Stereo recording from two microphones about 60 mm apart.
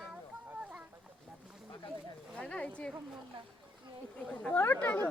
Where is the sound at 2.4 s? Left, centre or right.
Left.